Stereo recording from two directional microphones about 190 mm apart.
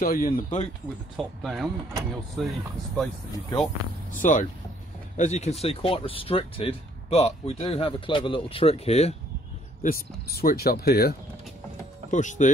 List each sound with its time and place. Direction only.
0.0 s speech: 50° left (ahead or behind)
1.1 s speech: centre (ahead or behind)
4.1 s speech: 40° left (ahead or behind)
9.8 s speech: 50° left (ahead or behind)
12.1 s speech: 40° left (ahead or behind)